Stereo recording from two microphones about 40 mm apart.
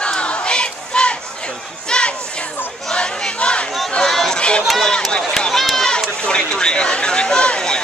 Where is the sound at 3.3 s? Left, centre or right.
Left.